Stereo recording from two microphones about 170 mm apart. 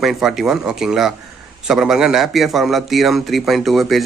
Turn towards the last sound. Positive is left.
turn(degrees=0)  # may be behind; listen again after turning